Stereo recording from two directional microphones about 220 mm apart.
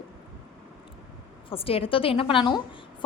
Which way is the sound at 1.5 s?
25° left (ahead or behind).